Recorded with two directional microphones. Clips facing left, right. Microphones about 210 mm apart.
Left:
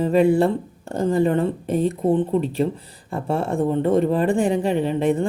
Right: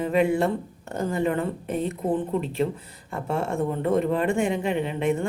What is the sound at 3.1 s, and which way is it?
Speech, 30° left (ahead or behind).